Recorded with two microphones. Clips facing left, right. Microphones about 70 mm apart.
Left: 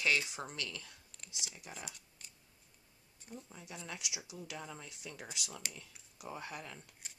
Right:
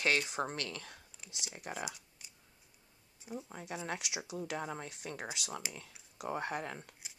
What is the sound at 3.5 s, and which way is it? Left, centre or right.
Speech, right.